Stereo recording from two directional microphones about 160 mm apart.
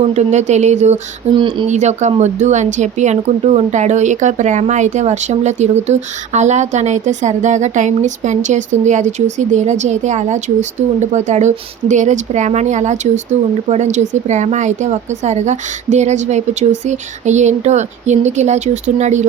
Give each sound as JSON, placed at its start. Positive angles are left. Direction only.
{"t": 0.1, "sound": "speech", "side_deg": -45}
{"t": 1.4, "sound": "speech", "side_deg": -30}
{"t": 1.7, "sound": "speech", "side_deg": -45}